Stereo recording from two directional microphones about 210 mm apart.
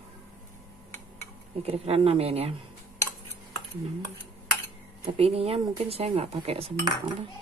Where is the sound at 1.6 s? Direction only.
30° right (ahead or behind).